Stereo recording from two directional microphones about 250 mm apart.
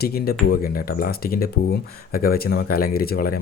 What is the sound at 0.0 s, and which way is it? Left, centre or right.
Speech, left.